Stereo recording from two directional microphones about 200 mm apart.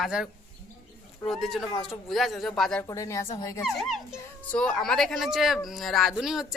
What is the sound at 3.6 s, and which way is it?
A woman's voice, centre (ahead or behind).